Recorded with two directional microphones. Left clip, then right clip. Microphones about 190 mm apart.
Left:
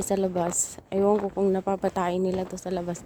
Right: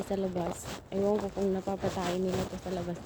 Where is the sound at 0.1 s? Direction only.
60° left (ahead or behind).